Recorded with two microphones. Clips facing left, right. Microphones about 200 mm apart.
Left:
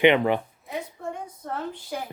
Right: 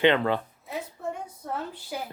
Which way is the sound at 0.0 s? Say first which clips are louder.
Left 3 dB; 15° left (ahead or behind).